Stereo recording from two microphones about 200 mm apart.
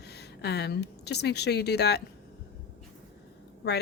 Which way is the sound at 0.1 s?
55° left (ahead or behind).